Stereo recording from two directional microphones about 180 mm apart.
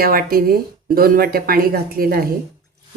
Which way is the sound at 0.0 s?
55° right (ahead or behind).